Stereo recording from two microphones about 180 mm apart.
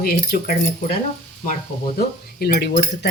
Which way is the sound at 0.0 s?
55° left (ahead or behind).